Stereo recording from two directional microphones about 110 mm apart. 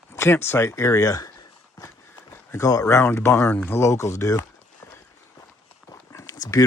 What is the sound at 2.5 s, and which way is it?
Speech, 30° left (ahead or behind).